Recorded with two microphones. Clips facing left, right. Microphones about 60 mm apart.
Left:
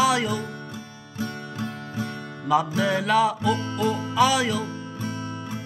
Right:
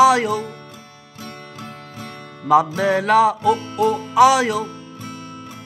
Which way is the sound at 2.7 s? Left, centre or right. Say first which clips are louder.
Right 5 dB; right.